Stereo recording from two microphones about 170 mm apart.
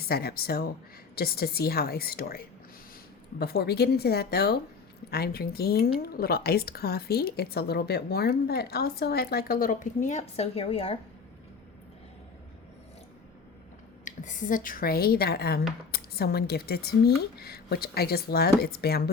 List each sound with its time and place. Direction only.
0.0 s a woman's voice: 65° left (ahead or behind); by 10.9 s 35° left (ahead or behind)
14.0 s a woman's voice: 50° left (ahead or behind); by 19.1 s 70° left (ahead or behind)